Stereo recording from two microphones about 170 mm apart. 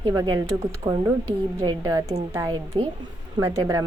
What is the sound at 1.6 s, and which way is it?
A woman's voice, 20° right (ahead or behind).